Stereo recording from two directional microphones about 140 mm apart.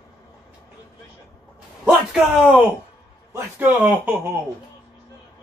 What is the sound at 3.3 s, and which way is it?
Speech, 15° right (ahead or behind).